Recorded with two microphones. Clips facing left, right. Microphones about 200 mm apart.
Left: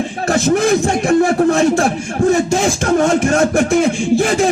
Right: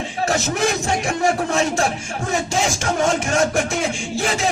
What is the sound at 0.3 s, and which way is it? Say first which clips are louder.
Speech: left 8 dB; 55° left (ahead or behind).